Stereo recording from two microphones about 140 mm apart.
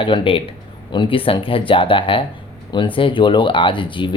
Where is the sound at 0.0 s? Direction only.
40° left (ahead or behind).